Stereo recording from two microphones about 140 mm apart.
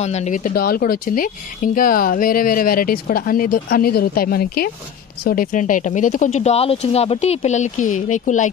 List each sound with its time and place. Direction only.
0.0 s speech: 55° left (ahead or behind); by 4.6 s 90° left
5.2 s speech: 80° left; by 8.5 s 65° left (ahead or behind)